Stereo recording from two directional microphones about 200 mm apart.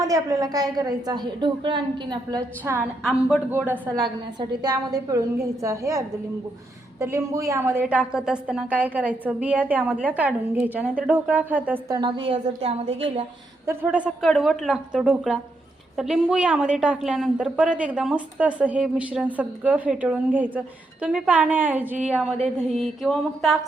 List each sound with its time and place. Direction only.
0.0 s a woman's voice: 15° right (ahead or behind)
2.6 s a woman's voice: 5° right (ahead or behind)
4.4 s a woman's voice: 20° right (ahead or behind)
11.9 s a woman's voice: 25° right (ahead or behind)
13.7 s a woman's voice: 5° right (ahead or behind)